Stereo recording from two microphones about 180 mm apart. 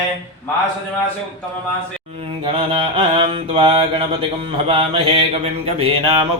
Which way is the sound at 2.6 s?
30° right (ahead or behind).